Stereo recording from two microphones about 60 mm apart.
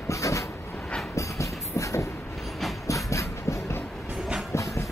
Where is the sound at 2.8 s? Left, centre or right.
Left.